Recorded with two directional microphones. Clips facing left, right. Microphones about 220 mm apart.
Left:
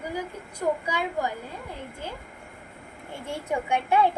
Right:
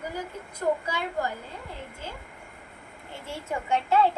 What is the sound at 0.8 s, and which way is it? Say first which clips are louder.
Speech: left 2 dB; 15° left (ahead or behind).